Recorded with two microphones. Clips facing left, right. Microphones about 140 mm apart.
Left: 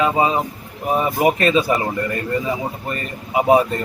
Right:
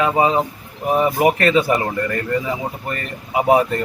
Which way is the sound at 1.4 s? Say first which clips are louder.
Right 1 dB; 20° left (ahead or behind).